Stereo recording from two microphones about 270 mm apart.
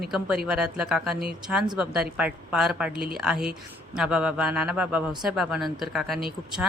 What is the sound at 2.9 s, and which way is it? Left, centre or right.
Speech, right.